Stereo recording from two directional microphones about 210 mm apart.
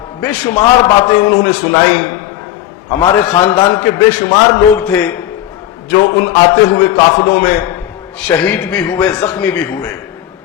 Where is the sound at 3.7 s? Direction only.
10° left (ahead or behind).